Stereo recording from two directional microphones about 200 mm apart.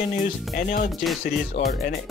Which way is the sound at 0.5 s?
45° left (ahead or behind).